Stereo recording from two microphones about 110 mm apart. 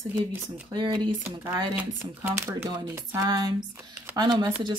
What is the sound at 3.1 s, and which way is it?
Speech, 35° right (ahead or behind).